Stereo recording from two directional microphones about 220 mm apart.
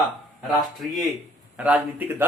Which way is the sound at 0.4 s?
Centre (ahead or behind).